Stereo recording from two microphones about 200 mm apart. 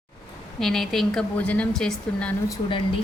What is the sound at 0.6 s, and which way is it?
A woman's voice, centre (ahead or behind).